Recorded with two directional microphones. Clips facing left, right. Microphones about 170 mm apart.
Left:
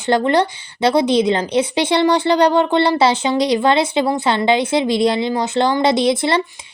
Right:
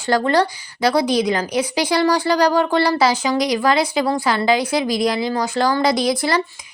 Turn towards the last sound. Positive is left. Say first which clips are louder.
# left 3 dB
turn(degrees=25)  # may be behind; listen again after turning